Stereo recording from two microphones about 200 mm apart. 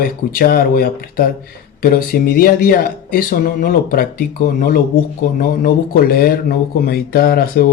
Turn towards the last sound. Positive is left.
turn(degrees=45)  # may be behind; listen again after turning